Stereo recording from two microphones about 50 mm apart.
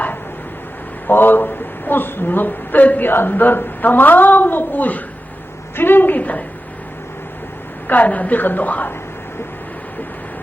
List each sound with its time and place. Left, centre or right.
1.0 s a woman's voice: left
3.1 s speech: left
7.9 s speech: left